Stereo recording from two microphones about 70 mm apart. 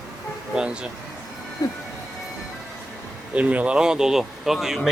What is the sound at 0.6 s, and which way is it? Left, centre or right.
Speech, centre.